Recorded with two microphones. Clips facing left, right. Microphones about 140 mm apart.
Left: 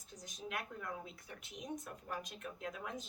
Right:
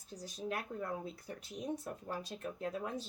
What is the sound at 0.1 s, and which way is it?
Speech, 35° right (ahead or behind).